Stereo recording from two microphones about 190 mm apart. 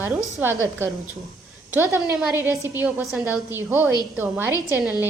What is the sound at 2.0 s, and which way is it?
Speech, 20° left (ahead or behind).